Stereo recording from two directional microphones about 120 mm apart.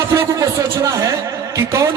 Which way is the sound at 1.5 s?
25° right (ahead or behind).